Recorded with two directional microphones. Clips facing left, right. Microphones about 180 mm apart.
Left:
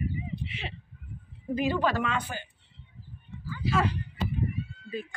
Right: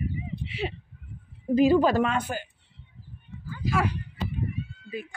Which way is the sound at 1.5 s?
35° right (ahead or behind).